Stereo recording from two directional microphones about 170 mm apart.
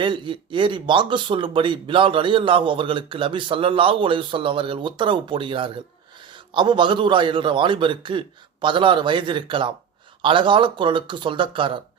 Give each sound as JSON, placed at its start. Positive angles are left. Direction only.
{"t": 0.0, "sound": "speech", "side_deg": -30}